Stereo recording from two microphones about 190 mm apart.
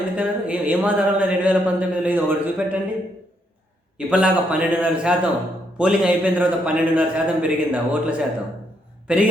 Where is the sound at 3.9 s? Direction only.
5° right (ahead or behind).